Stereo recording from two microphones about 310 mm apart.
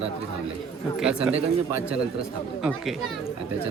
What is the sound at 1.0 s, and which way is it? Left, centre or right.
Speech, centre.